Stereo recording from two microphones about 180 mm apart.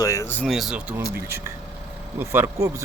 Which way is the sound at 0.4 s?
Centre (ahead or behind).